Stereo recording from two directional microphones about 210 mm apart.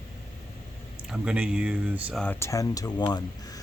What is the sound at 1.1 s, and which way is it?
Speech, 5° right (ahead or behind).